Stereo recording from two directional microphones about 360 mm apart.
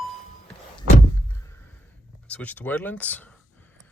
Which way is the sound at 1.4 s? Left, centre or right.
Centre.